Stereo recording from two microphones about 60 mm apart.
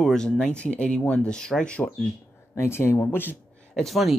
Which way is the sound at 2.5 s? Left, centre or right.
Left.